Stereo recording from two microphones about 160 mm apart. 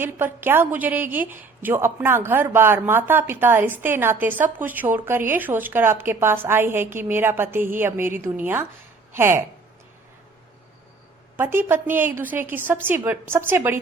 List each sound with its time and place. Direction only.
0.0 s a woman's voice: 15° right (ahead or behind)
11.3 s a woman's voice: 15° right (ahead or behind)